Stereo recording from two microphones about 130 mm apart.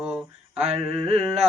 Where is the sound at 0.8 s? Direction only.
45° right (ahead or behind).